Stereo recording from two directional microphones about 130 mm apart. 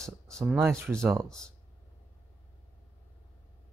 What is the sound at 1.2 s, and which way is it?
Speech, 5° left (ahead or behind).